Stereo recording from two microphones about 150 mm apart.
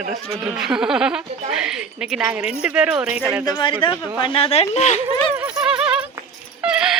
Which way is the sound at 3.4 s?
30° left (ahead or behind).